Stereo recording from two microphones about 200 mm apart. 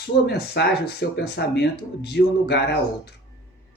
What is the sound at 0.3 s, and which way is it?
Speech, 55° left (ahead or behind).